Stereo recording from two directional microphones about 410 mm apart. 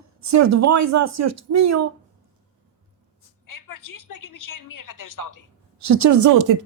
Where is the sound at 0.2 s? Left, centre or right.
Right.